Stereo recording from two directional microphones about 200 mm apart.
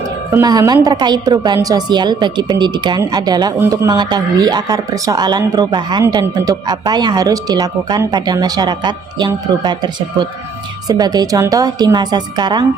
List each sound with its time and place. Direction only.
0.3 s a woman's voice: 15° right (ahead or behind)